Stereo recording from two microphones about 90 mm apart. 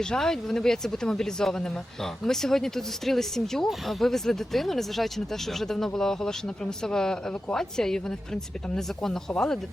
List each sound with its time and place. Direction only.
0.0 s speech: 5° left (ahead or behind)